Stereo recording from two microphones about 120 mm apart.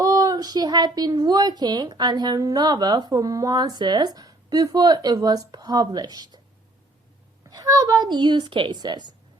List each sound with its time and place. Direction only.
0.0 s a woman's voice: 30° right (ahead or behind)
7.5 s a woman's voice: 30° right (ahead or behind)